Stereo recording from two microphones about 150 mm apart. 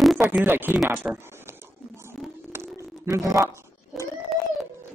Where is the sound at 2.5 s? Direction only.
15° right (ahead or behind).